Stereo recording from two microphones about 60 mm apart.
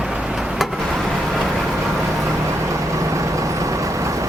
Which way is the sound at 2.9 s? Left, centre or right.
Right.